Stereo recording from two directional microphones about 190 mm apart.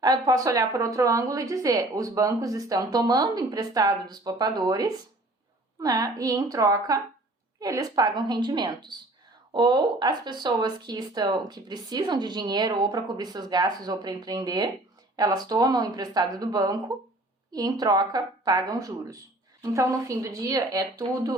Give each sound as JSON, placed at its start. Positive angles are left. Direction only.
{"t": 0.0, "sound": "a woman's voice", "side_deg": -20}